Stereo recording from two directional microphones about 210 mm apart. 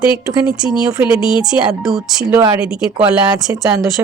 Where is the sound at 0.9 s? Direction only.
5° right (ahead or behind).